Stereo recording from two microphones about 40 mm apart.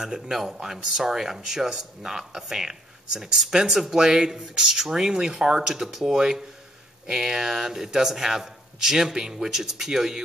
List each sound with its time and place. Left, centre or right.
0.0 s a man's voice: centre